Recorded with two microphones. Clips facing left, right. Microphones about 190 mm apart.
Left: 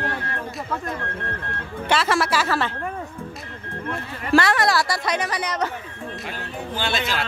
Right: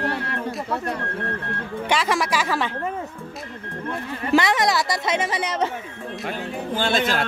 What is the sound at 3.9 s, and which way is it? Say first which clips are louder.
Speech: even; 20° right (ahead or behind).